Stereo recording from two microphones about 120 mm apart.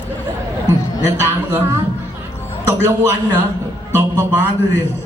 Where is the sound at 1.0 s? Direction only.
25° right (ahead or behind).